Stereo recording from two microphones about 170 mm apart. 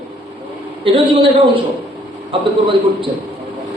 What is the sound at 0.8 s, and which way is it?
A man's voice, 30° right (ahead or behind).